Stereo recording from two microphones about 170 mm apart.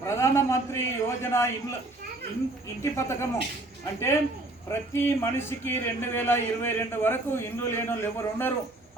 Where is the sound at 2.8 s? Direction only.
15° left (ahead or behind).